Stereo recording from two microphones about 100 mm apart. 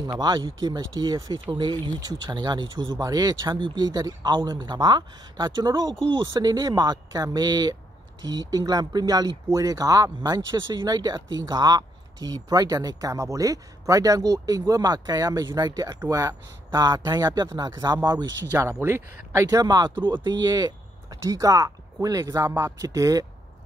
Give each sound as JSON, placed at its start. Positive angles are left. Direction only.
{"t": 0.2, "sound": "speech", "side_deg": -45}
{"t": 3.0, "sound": "speech", "side_deg": -40}
{"t": 18.4, "sound": "speech", "side_deg": -25}
{"t": 22.8, "sound": "speech", "side_deg": -35}